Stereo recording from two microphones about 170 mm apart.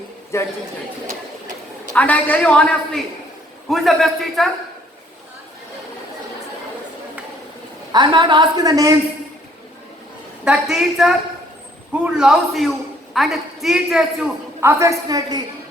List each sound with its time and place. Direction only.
0.3 s a man's voice: 15° left (ahead or behind)
2.0 s a man's voice: 10° left (ahead or behind)
7.9 s a woman's voice: 25° right (ahead or behind)
10.4 s a man's voice: 5° right (ahead or behind)
14.6 s a woman's voice: 15° right (ahead or behind)